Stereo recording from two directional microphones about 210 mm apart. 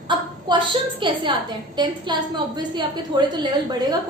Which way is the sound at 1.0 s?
20° right (ahead or behind).